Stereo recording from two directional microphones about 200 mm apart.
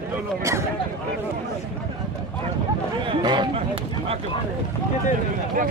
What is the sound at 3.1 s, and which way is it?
Chatter, 20° right (ahead or behind).